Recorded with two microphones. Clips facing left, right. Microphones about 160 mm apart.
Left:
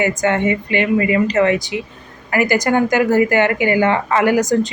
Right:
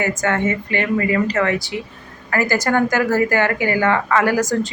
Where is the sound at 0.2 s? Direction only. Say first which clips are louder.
Left 3 dB; 20° left (ahead or behind).